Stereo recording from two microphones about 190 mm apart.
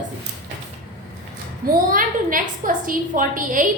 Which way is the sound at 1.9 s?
45° right (ahead or behind).